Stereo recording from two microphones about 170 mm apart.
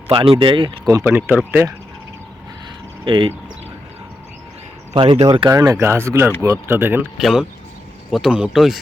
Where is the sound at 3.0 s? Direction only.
30° right (ahead or behind).